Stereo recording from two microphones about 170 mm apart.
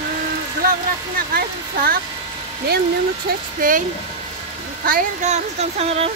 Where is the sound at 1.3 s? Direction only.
60° right (ahead or behind).